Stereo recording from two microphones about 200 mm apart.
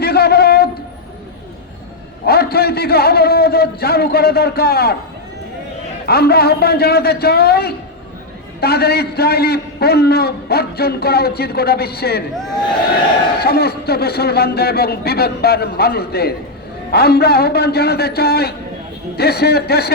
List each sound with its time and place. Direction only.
0.0 s a sound: 55° left (ahead or behind)
2.2 s a man's voice: 50° left (ahead or behind)
6.1 s a man's voice: 50° left (ahead or behind)
13.3 s a man's voice: 50° left (ahead or behind)